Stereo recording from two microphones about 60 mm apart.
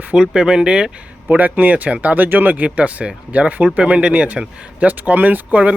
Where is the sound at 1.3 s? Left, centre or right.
Right.